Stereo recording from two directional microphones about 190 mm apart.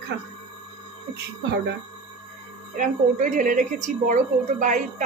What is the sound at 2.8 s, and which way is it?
A woman's voice, 45° right (ahead or behind).